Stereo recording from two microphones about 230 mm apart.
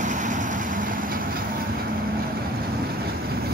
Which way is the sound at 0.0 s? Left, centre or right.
Right.